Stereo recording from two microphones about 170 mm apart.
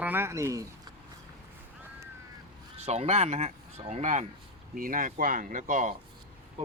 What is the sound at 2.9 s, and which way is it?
Speech, 40° right (ahead or behind).